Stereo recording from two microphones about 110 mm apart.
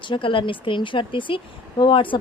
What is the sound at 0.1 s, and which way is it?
A woman's voice, 50° left (ahead or behind).